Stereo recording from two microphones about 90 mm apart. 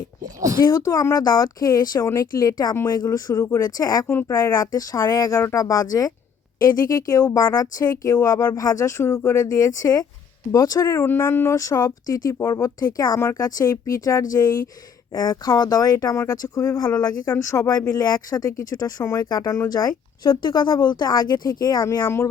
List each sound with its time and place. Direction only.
0.6 s speech: 40° left (ahead or behind)
4.1 s speech: 25° left (ahead or behind)
18.0 s speech: 50° left (ahead or behind)
20.2 s speech: 55° left (ahead or behind)
20.8 s speech: 50° left (ahead or behind)
21.8 s speech: 30° left (ahead or behind)